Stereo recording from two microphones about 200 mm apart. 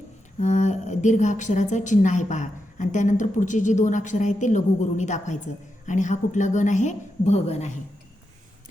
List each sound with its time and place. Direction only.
0.3 s a woman's voice: 35° left (ahead or behind)